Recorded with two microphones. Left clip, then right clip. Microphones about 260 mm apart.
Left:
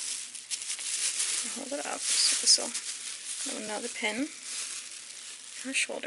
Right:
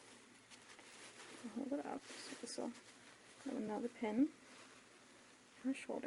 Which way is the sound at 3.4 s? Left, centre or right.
Centre.